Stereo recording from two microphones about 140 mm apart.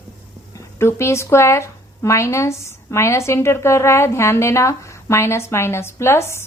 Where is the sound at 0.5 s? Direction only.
20° left (ahead or behind).